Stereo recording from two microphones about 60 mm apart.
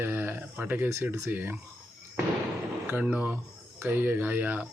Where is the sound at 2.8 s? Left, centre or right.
Right.